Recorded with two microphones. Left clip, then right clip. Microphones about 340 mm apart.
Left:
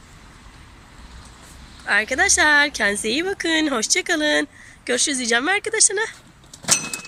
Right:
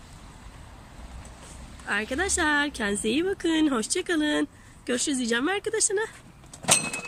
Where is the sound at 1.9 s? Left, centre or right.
Centre.